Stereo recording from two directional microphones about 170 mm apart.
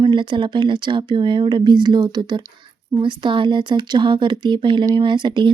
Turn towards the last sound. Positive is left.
turn(degrees=-25)  # may be behind; listen again after turning